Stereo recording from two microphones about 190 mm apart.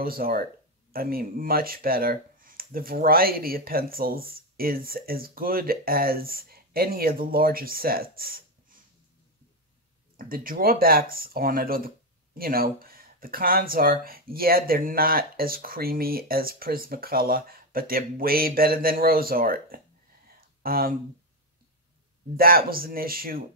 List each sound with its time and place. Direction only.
0.0 s speech: 50° right (ahead or behind)
10.1 s speech: 50° right (ahead or behind)
20.3 s a sound: 50° right (ahead or behind)
22.4 s speech: 50° right (ahead or behind)